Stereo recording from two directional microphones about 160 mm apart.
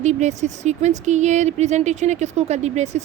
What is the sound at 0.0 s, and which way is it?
Speech, 45° right (ahead or behind).